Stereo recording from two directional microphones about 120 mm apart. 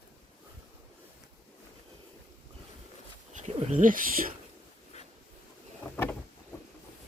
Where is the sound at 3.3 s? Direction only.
90° right.